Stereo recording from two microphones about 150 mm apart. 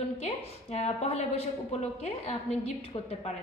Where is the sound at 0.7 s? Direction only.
45° left (ahead or behind).